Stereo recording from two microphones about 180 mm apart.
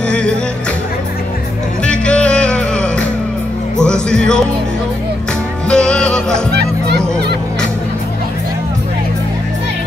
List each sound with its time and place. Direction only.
1.9 s music: 5° left (ahead or behind)
5.7 s music: 5° left (ahead or behind)
6.5 s music: 65° right (ahead or behind)